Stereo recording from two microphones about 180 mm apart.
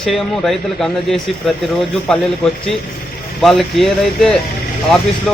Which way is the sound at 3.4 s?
Centre (ahead or behind).